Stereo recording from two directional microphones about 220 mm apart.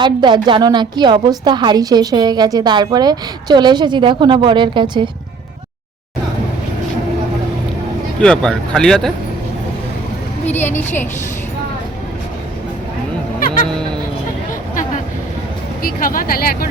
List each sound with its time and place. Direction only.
0.0 s a woman's voice: 20° right (ahead or behind)
8.2 s speech: 5° left (ahead or behind)
10.4 s a woman's voice: 10° left (ahead or behind)
15.8 s speech: 40° left (ahead or behind)